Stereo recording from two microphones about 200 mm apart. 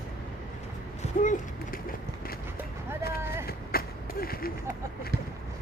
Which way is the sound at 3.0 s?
50° left (ahead or behind).